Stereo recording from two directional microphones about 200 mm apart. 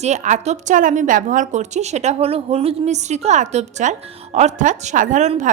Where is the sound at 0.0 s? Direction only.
35° right (ahead or behind).